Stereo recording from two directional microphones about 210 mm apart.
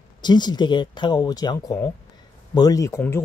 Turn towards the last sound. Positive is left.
turn(degrees=10)  # may be behind; listen again after turning